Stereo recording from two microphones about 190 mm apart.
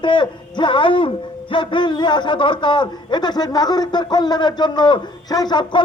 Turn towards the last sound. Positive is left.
turn(degrees=25)  # may be behind; listen again after turning